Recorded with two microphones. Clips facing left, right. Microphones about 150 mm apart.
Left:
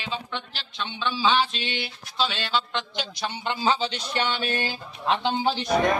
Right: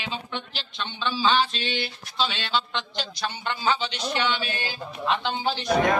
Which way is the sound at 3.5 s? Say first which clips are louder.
Left 2 dB; 30° left (ahead or behind).